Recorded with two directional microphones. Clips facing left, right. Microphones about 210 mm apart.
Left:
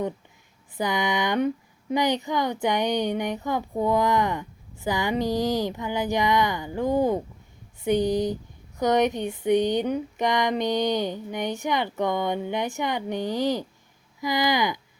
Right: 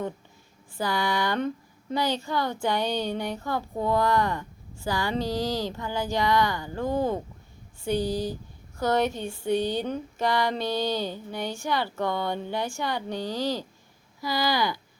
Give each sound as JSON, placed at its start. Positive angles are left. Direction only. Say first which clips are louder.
{"t": 0.8, "sound": "speech", "louder": "left 2 dB", "side_deg": 20}
{"t": 7.9, "sound": "a sound", "louder": "left 4 dB", "side_deg": 20}
{"t": 14.2, "sound": "speech", "louder": "left 2 dB", "side_deg": 15}